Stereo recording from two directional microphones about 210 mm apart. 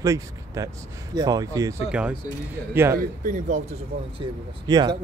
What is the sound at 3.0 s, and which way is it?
Speech, 40° right (ahead or behind).